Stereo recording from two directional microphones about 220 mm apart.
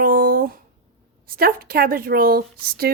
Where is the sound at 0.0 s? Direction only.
40° right (ahead or behind).